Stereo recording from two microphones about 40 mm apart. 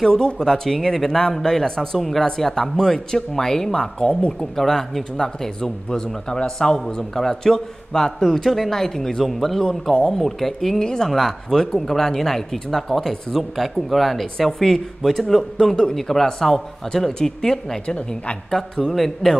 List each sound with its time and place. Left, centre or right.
0.0 s speech: centre
17.8 s a woman's voice: left
18.9 s speech: centre